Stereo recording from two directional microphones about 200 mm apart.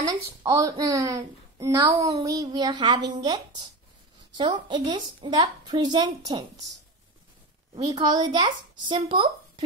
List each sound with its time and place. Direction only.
0.0 s a woman's voice: 15° right (ahead or behind)
7.7 s a woman's voice: 20° right (ahead or behind)